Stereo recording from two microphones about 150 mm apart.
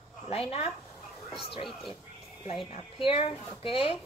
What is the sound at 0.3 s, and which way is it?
Speech, 40° left (ahead or behind).